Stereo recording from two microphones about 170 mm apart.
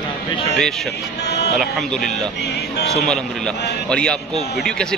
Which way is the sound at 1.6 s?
Centre (ahead or behind).